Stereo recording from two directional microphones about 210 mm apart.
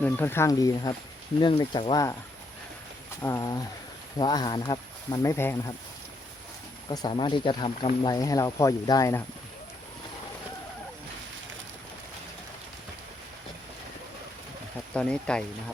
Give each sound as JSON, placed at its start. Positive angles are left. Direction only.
{"t": 0.0, "sound": "speech", "side_deg": 10}
{"t": 3.2, "sound": "speech", "side_deg": 15}
{"t": 6.8, "sound": "speech", "side_deg": 20}
{"t": 14.9, "sound": "speech", "side_deg": 5}